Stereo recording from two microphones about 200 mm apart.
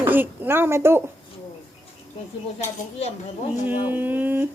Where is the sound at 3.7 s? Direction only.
10° right (ahead or behind).